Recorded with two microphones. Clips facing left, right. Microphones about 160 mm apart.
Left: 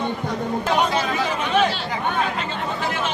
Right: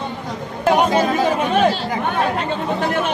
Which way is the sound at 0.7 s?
45° right (ahead or behind).